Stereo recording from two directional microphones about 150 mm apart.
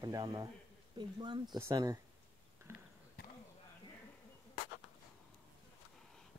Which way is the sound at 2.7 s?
15° right (ahead or behind).